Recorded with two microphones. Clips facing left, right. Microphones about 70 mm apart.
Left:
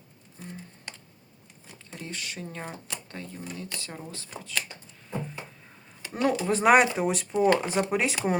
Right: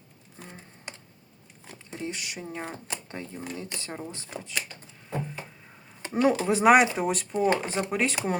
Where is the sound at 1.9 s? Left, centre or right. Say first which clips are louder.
Right 3 dB; centre.